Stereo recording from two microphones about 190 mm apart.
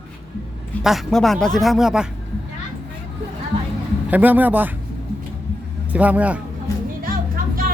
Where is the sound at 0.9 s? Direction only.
Centre (ahead or behind).